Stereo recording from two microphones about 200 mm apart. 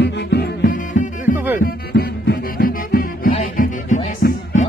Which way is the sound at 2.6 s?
45° left (ahead or behind).